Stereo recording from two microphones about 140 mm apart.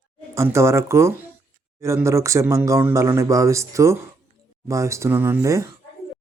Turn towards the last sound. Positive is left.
turn(degrees=-20)  # may be behind; listen again after turning